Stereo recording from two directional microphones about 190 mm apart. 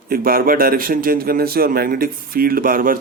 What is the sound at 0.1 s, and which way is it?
A man's voice, 50° right (ahead or behind).